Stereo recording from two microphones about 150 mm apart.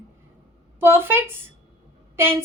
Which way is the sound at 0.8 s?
15° right (ahead or behind).